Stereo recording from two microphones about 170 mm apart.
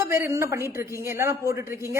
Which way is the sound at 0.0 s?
15° right (ahead or behind).